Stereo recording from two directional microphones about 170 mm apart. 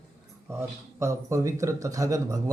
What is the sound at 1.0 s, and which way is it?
Speech, 15° right (ahead or behind).